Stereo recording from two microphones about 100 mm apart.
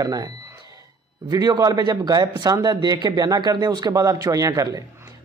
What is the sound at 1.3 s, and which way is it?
A man's voice, 40° right (ahead or behind).